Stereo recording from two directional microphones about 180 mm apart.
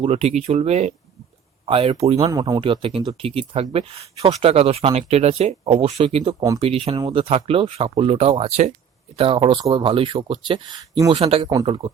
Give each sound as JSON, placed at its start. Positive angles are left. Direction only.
{"t": 0.0, "sound": "speech", "side_deg": -35}
{"t": 2.3, "sound": "speech", "side_deg": -20}
{"t": 2.6, "sound": "speech", "side_deg": -30}